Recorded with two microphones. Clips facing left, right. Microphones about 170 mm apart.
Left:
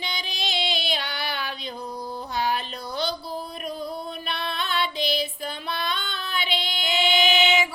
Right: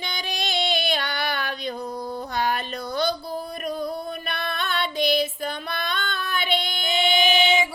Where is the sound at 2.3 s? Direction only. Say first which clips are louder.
Right 1 dB; 50° right (ahead or behind).